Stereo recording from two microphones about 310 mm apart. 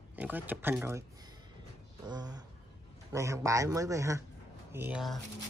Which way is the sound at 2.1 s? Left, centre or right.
Centre.